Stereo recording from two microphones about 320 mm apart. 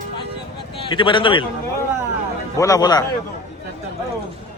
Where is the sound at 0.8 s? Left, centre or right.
Centre.